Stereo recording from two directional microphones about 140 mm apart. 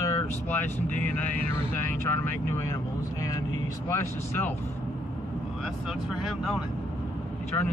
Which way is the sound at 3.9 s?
15° left (ahead or behind).